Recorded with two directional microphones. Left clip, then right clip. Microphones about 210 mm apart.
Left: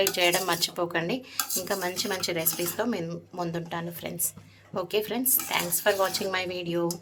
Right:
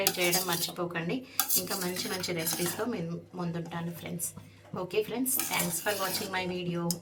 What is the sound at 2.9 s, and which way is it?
Speech, 55° left (ahead or behind).